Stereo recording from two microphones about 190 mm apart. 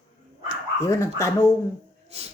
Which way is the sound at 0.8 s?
15° left (ahead or behind).